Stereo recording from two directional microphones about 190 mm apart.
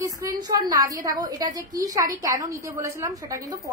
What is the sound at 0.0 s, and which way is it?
A woman's voice, 20° right (ahead or behind).